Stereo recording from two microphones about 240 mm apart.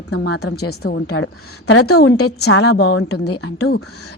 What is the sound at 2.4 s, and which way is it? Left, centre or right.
Speech, left.